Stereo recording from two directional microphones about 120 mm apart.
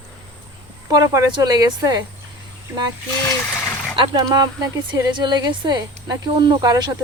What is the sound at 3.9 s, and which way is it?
Speech, 45° right (ahead or behind).